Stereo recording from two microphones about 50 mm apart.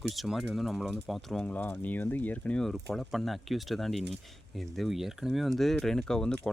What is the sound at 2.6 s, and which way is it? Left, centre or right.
Speech, centre.